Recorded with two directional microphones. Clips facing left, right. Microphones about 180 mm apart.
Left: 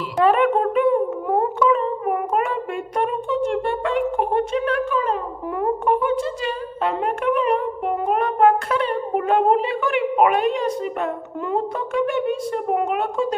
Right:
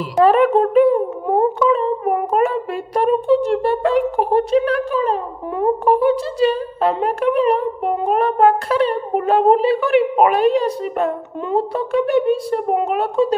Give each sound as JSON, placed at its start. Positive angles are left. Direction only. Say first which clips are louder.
{"t": 0.2, "sound": "speech", "louder": "right 4 dB", "side_deg": -35}